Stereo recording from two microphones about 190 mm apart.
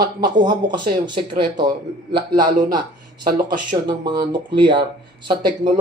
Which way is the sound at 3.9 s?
25° right (ahead or behind).